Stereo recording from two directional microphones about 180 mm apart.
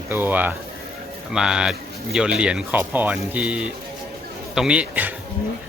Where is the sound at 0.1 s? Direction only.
10° right (ahead or behind).